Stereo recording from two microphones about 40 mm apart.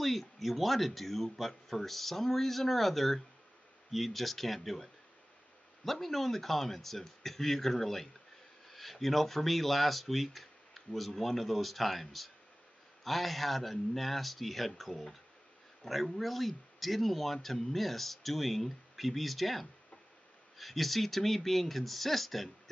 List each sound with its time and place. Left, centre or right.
0.0 s a man's voice: centre
5.9 s a man's voice: centre